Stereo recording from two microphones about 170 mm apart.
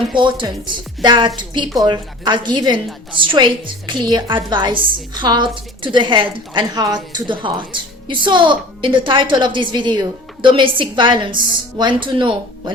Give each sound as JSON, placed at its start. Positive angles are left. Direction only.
{"t": 0.2, "sound": "a woman's voice", "side_deg": -30}